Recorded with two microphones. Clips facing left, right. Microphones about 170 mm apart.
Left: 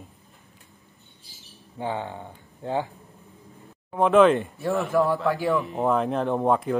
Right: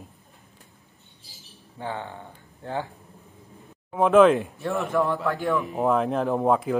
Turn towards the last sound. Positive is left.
turn(degrees=0)  # may be behind; listen again after turning